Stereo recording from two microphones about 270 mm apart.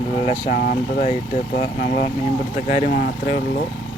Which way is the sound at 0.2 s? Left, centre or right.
Left.